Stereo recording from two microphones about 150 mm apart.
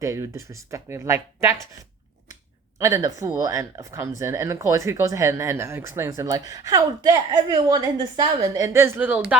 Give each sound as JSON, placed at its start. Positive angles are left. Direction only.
{"t": 0.0, "sound": "speech", "side_deg": -20}
{"t": 2.7, "sound": "speech", "side_deg": -20}